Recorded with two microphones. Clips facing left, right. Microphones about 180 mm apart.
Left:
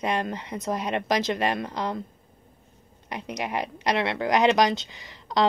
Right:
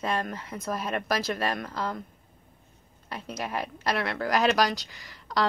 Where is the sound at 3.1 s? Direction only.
15° left (ahead or behind).